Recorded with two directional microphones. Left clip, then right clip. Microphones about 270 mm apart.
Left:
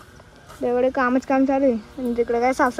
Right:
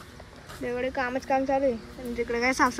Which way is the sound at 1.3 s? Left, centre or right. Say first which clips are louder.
Left 3 dB; left.